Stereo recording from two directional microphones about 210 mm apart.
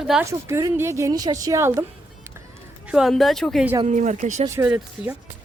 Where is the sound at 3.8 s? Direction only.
35° right (ahead or behind).